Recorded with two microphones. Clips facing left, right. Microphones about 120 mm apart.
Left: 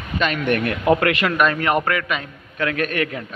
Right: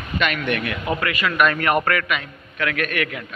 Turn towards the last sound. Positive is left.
turn(degrees=30)  # may be behind; listen again after turning